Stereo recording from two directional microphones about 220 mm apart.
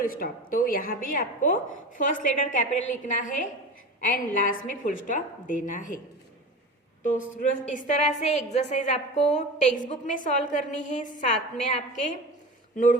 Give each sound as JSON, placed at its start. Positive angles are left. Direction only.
{"t": 0.0, "sound": "a woman's voice", "side_deg": 40}
{"t": 7.3, "sound": "a woman's voice", "side_deg": 35}